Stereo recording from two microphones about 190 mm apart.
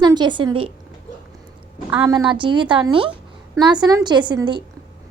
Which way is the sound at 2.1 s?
25° right (ahead or behind).